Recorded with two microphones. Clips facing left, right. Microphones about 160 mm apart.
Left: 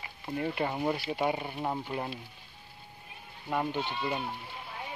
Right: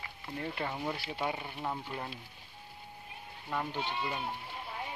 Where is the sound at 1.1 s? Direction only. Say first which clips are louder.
Left 6 dB; 15° left (ahead or behind).